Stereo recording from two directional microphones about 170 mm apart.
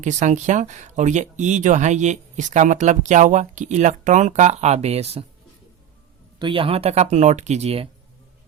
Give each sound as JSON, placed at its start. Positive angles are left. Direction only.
{"t": 0.0, "sound": "speech", "side_deg": -45}
{"t": 6.4, "sound": "speech", "side_deg": -30}